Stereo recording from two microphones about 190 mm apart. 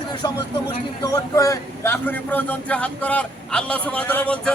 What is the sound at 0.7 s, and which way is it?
A man's voice, 20° left (ahead or behind).